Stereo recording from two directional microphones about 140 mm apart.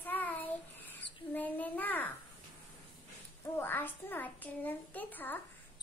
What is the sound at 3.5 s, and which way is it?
A child's voice, 15° left (ahead or behind).